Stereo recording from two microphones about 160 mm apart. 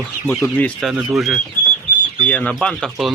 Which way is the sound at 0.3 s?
5° left (ahead or behind).